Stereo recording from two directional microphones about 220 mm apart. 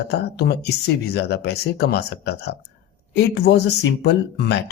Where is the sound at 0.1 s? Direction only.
50° left (ahead or behind).